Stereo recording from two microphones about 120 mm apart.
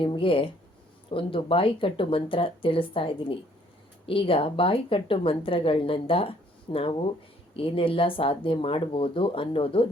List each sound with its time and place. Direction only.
0.0 s a woman's voice: 45° left (ahead or behind)